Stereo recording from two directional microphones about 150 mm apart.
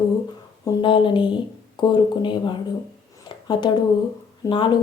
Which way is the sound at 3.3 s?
30° left (ahead or behind).